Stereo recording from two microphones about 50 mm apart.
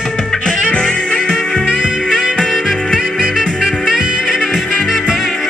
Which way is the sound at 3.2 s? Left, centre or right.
Centre.